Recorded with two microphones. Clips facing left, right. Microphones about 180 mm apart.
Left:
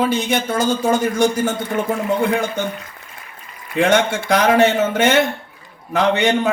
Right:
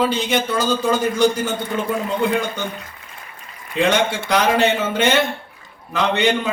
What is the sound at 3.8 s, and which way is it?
Speech, 50° left (ahead or behind).